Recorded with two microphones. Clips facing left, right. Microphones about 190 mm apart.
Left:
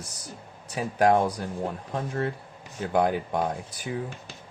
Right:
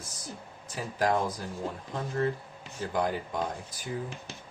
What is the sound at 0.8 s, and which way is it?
Speech, 65° left (ahead or behind).